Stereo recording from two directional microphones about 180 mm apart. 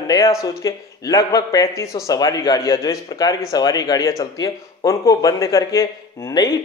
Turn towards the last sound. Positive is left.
turn(degrees=20)  # may be behind; listen again after turning